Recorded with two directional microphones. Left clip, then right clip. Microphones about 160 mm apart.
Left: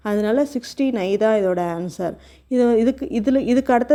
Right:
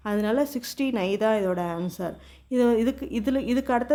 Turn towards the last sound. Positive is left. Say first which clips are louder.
# left 7 dB
turn(degrees=30)  # may be behind; listen again after turning